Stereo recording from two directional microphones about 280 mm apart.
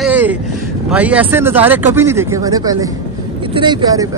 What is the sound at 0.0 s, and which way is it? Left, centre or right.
Vehicle, centre.